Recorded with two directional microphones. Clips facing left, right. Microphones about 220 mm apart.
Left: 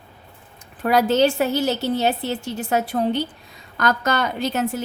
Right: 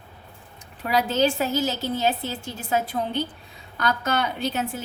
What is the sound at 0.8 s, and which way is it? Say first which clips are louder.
Speech: left 5 dB; 45° left (ahead or behind).